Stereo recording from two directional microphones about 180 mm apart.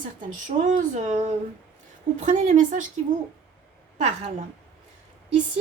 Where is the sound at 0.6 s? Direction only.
40° right (ahead or behind).